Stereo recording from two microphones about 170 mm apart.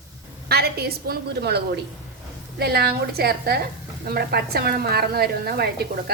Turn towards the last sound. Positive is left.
turn(degrees=-70)  # may be behind; listen again after turning